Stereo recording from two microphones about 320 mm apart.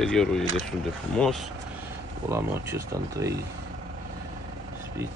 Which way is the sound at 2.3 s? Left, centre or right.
Centre.